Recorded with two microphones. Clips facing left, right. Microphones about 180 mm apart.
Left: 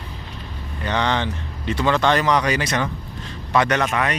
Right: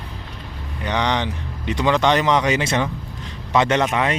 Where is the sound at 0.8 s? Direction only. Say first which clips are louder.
Even; 15° right (ahead or behind).